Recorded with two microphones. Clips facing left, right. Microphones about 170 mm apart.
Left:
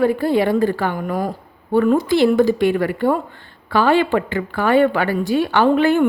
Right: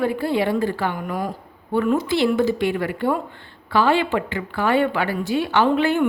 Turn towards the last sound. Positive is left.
turn(degrees=45)  # may be behind; listen again after turning